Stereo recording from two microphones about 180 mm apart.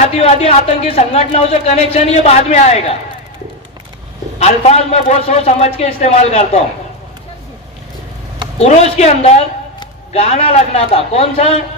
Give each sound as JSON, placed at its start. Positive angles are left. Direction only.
{"t": 0.2, "sound": "speech", "side_deg": 35}
{"t": 4.4, "sound": "speech", "side_deg": 35}
{"t": 8.5, "sound": "a man's voice", "side_deg": 35}